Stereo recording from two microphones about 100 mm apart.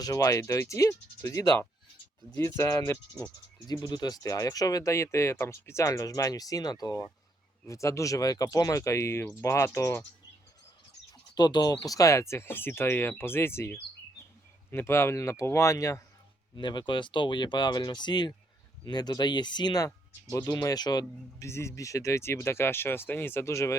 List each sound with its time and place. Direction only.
0.0 s speech: 35° left (ahead or behind)
3.7 s speech: 45° left (ahead or behind)
11.3 s speech: 45° left (ahead or behind)
16.6 s speech: 50° left (ahead or behind)
21.4 s speech: 30° left (ahead or behind)